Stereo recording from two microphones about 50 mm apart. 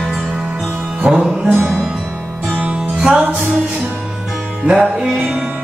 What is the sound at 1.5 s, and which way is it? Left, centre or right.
Music, right.